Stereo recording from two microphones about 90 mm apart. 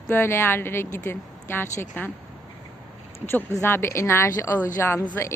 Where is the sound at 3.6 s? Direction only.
30° left (ahead or behind).